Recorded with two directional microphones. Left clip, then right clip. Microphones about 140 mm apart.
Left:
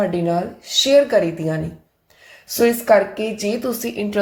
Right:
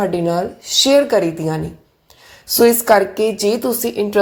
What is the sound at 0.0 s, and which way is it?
A woman's voice, 20° right (ahead or behind).